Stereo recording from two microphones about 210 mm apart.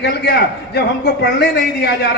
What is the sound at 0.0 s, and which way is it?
A man's voice, 50° left (ahead or behind).